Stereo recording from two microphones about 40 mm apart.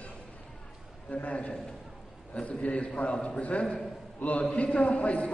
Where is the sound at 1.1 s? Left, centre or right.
Left.